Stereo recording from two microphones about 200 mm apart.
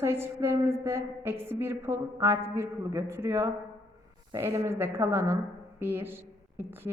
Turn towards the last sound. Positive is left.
turn(degrees=-10)  # may be behind; listen again after turning